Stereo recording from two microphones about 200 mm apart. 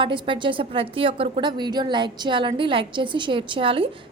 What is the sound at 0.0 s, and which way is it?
A woman's voice, 25° right (ahead or behind).